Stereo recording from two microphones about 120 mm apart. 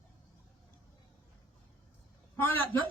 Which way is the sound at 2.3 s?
15° left (ahead or behind).